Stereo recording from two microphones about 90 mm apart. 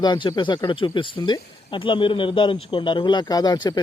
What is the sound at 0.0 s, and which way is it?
Speech, 55° left (ahead or behind).